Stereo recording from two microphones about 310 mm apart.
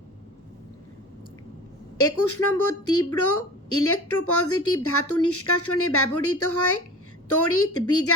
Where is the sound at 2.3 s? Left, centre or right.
Left.